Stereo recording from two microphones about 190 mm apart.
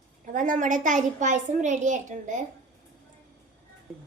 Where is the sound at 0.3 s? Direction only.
45° right (ahead or behind).